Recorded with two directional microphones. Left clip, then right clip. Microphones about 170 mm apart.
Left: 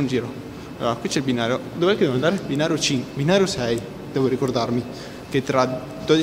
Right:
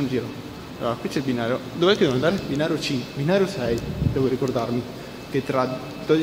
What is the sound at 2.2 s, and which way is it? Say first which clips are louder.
A man's voice: left 1 dB; 15° left (ahead or behind).